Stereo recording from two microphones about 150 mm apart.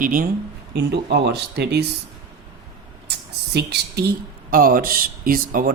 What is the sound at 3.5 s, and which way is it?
Speech, 90° right.